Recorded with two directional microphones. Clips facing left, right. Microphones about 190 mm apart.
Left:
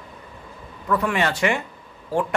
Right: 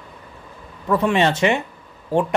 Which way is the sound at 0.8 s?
25° right (ahead or behind).